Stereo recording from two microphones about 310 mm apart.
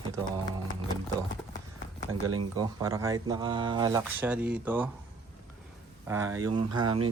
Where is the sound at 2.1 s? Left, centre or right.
Right.